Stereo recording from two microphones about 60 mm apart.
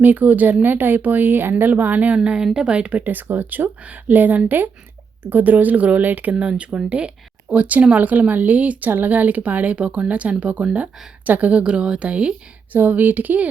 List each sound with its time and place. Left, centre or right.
0.0 s speech: right
2.1 s speech: centre
6.3 s speech: centre
12.7 s speech: right